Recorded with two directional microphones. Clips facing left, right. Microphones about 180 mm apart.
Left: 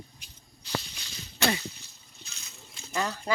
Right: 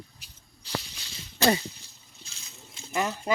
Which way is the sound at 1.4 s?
30° right (ahead or behind).